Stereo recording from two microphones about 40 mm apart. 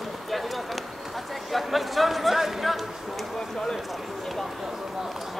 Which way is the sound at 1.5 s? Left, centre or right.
Centre.